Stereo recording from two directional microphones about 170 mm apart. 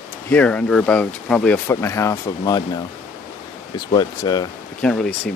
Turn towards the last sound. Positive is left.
turn(degrees=0)  # may be behind; listen again after turning